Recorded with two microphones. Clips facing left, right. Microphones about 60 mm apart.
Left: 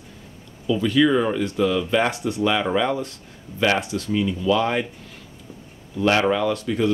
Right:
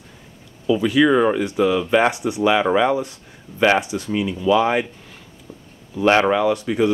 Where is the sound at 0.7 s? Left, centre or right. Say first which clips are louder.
Right 3 dB; centre.